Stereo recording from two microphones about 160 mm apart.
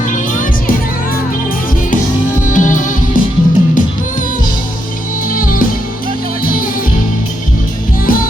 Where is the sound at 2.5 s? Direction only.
55° left (ahead or behind).